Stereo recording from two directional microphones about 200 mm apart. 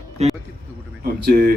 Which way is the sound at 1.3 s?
45° right (ahead or behind).